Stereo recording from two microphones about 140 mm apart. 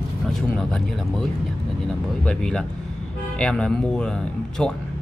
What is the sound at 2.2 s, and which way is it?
Speech, 5° left (ahead or behind).